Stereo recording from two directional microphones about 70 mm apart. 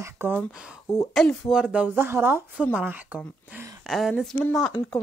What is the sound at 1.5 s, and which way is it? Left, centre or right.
Speech, centre.